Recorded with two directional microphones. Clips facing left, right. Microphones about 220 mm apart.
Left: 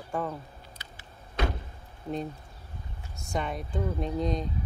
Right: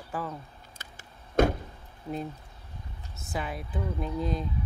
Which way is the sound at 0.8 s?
45° right (ahead or behind).